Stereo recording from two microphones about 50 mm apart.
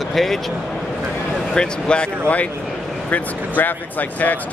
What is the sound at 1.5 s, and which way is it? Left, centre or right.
Speech, centre.